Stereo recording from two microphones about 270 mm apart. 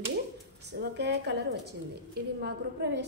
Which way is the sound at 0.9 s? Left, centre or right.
Right.